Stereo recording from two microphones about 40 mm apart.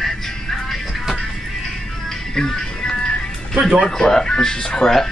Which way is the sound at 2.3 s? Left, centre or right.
Centre.